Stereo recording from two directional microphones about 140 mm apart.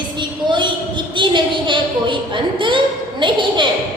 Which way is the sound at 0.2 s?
35° right (ahead or behind).